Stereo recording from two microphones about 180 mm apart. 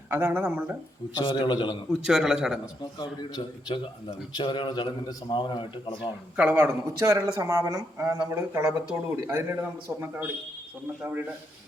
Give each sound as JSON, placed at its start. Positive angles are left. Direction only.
{"t": 0.1, "sound": "speech", "side_deg": -10}
{"t": 1.2, "sound": "a man's voice", "side_deg": 30}
{"t": 2.0, "sound": "a man's voice", "side_deg": -5}
{"t": 3.0, "sound": "a man's voice", "side_deg": 25}
{"t": 6.0, "sound": "speech", "side_deg": -10}